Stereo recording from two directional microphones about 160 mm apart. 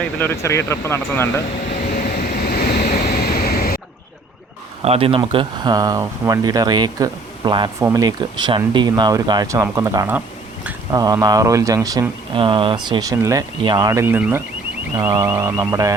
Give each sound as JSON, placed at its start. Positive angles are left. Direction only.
{"t": 0.0, "sound": "speech", "side_deg": 10}
{"t": 1.7, "sound": "vehicle", "side_deg": 80}
{"t": 3.0, "sound": "a sound", "side_deg": 75}
{"t": 4.8, "sound": "speech", "side_deg": -35}
{"t": 10.9, "sound": "speech", "side_deg": -25}
{"t": 14.9, "sound": "speech", "side_deg": -25}